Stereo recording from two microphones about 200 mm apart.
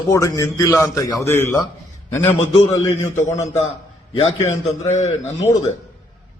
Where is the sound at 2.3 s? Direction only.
30° left (ahead or behind).